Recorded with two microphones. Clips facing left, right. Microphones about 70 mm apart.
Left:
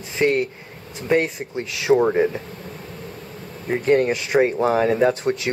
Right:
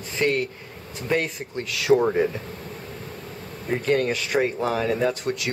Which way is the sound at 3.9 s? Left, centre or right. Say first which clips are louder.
Left 5 dB; left.